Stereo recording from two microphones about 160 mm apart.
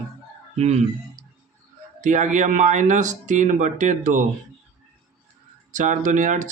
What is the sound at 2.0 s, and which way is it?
Speech, 50° right (ahead or behind).